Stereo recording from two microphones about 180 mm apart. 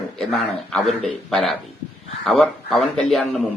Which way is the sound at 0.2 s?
5° left (ahead or behind).